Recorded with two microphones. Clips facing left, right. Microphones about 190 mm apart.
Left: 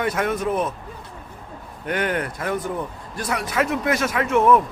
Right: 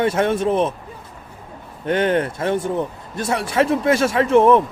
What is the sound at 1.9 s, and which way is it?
A man's voice, 25° right (ahead or behind).